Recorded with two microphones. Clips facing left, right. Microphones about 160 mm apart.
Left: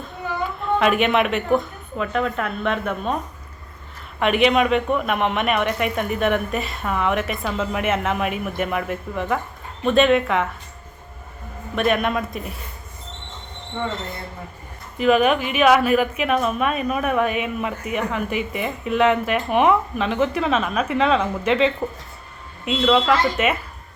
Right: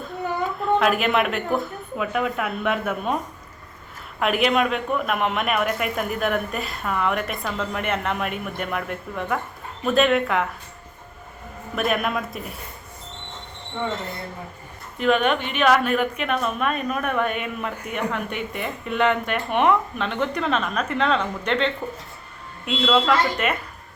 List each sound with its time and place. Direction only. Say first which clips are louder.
0.8 s a woman's voice: left 4 dB; centre (ahead or behind)
4.2 s a woman's voice: left 3 dB; centre (ahead or behind)
11.7 s a woman's voice: left 3 dB; centre (ahead or behind)
14.9 s a woman's voice: left 3 dB; 5° left (ahead or behind)